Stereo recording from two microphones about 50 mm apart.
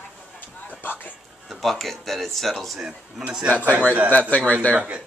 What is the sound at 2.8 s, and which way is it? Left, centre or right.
Speech, centre.